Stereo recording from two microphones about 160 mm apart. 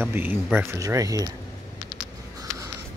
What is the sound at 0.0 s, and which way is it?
Speech, 15° right (ahead or behind).